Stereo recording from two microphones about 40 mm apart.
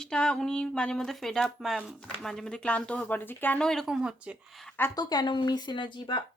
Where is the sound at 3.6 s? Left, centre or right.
Centre.